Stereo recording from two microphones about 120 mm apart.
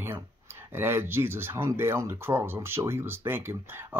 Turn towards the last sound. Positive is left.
turn(degrees=-15)  # may be behind; listen again after turning